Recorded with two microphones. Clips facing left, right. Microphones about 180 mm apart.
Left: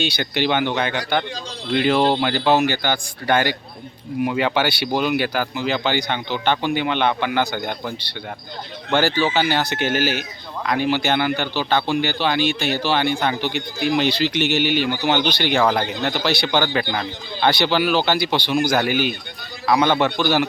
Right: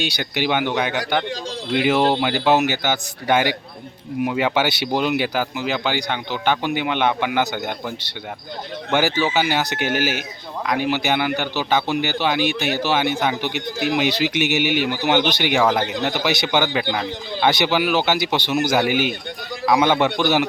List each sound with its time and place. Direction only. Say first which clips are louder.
0.2 s speech: even; 10° right (ahead or behind)